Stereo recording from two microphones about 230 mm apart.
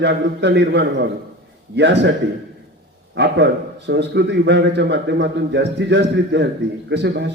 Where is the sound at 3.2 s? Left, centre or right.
Right.